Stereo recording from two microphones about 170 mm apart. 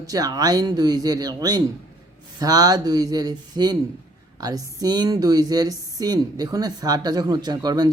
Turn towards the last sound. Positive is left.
turn(degrees=-25)  # may be behind; listen again after turning